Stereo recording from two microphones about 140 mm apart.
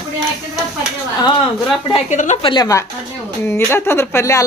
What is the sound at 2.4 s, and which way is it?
A woman's voice, 30° left (ahead or behind).